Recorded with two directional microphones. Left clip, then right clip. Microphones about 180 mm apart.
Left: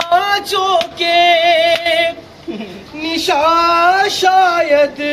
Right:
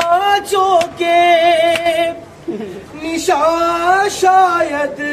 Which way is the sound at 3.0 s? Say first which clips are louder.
Even; 5° left (ahead or behind).